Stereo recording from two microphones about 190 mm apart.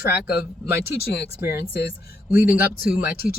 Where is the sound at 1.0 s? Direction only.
60° left (ahead or behind).